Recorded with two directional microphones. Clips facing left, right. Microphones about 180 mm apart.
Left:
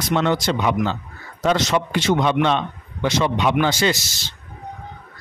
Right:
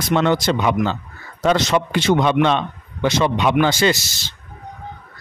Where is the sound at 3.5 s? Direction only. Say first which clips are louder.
Right 3 dB; 60° right (ahead or behind).